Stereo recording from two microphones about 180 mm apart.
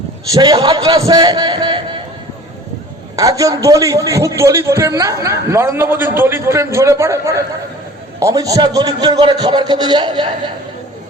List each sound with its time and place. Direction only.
0.3 s a man's voice: 25° right (ahead or behind)
3.2 s a man's voice: 20° right (ahead or behind)